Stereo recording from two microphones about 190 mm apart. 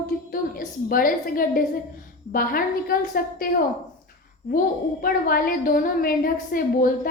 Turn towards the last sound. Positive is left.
turn(degrees=50)  # may be behind; listen again after turning